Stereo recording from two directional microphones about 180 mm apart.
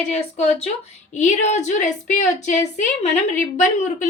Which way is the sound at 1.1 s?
40° left (ahead or behind).